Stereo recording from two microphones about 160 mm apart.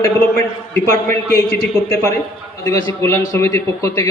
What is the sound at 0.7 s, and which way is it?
Speech, 15° left (ahead or behind).